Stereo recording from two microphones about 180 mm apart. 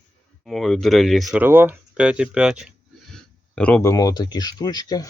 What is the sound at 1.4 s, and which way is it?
Speech, 10° right (ahead or behind).